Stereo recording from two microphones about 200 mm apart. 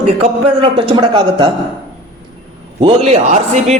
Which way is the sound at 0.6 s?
25° right (ahead or behind).